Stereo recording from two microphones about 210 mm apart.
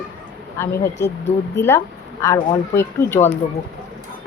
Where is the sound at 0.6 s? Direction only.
10° left (ahead or behind).